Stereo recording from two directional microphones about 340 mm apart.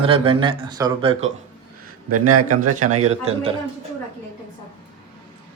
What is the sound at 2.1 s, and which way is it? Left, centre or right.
Speech, right.